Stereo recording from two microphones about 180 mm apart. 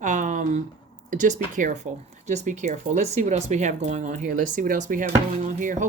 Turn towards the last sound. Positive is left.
turn(degrees=-45)  # may be behind; listen again after turning